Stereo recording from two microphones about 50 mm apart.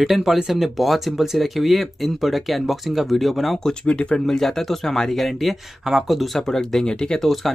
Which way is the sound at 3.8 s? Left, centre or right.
Left.